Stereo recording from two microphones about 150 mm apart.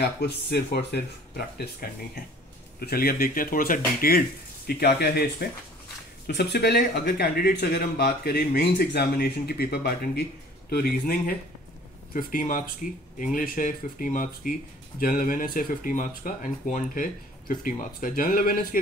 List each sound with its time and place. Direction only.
0.0 s speech: 90° left; by 4.2 s 70° left (ahead or behind)
4.6 s speech: 90° left
12.1 s speech: 70° left (ahead or behind)